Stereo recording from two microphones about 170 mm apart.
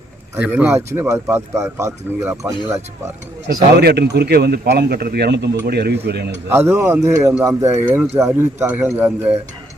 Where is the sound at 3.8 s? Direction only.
75° right (ahead or behind).